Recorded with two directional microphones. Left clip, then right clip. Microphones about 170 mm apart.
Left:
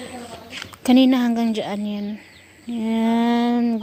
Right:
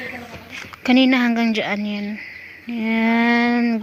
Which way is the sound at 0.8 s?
25° left (ahead or behind).